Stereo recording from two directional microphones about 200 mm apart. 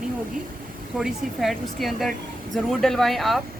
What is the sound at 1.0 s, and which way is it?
Speech, centre (ahead or behind).